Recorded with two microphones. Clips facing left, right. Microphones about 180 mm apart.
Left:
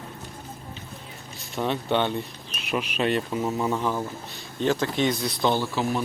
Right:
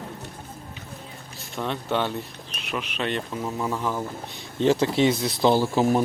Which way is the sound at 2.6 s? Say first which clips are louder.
Left 4 dB; 10° left (ahead or behind).